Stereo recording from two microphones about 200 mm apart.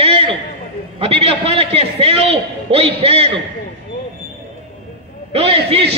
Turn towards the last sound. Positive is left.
turn(degrees=-30)  # may be behind; listen again after turning